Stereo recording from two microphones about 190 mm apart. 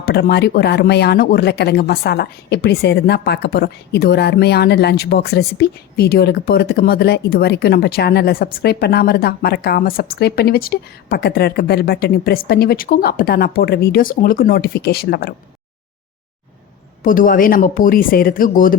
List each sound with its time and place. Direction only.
0.0 s speech: 55° left (ahead or behind)
17.0 s speech: 45° left (ahead or behind)